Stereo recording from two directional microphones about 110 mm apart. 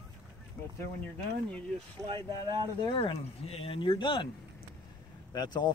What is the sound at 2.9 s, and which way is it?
Speech, 55° left (ahead or behind).